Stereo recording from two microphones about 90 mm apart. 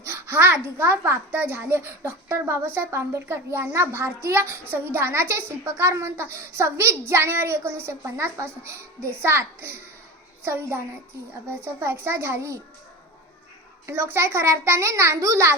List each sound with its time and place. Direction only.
0.1 s a child's voice: 25° right (ahead or behind)
13.8 s a child's voice: 25° right (ahead or behind)